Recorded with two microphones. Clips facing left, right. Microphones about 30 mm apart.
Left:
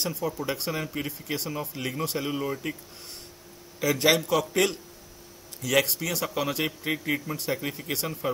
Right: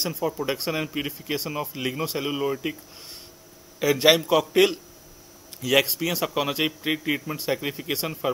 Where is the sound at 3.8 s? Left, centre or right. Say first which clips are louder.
Right 4 dB; centre.